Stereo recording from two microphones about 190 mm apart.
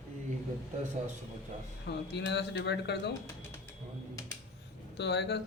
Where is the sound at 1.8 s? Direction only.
60° left (ahead or behind).